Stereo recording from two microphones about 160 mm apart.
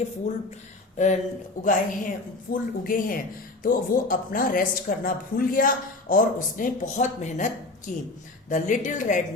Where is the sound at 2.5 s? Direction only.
65° left (ahead or behind).